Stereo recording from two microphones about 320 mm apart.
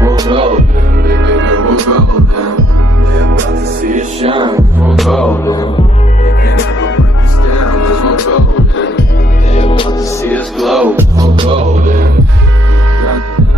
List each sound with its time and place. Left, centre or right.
0.0 s music: centre
1.0 s music: right
3.8 s music: right
4.9 s music: centre
7.4 s music: left
9.5 s music: centre
10.6 s music: centre; by 12.1 s right